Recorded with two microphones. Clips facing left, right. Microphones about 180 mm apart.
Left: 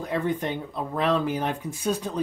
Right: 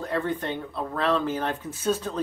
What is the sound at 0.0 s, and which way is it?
Speech, 15° left (ahead or behind).